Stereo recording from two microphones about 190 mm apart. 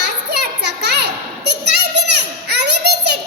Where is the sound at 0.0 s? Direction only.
60° right (ahead or behind).